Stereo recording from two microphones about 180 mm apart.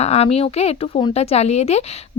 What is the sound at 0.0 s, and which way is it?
Speech, 35° left (ahead or behind).